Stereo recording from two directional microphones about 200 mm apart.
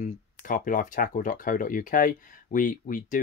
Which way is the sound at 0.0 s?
40° left (ahead or behind).